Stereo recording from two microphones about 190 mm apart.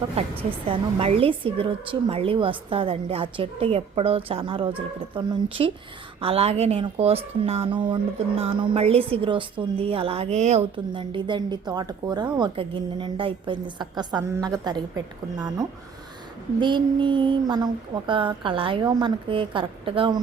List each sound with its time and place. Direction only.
0.3 s a woman's voice: 30° right (ahead or behind)